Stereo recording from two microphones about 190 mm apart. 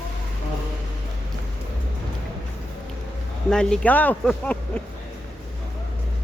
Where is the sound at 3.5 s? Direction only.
5° left (ahead or behind).